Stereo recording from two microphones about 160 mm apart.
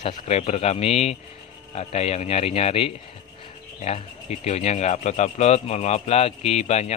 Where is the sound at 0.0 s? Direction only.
45° left (ahead or behind).